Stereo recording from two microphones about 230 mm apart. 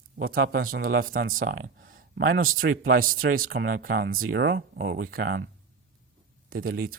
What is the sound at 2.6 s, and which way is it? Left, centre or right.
Speech, right.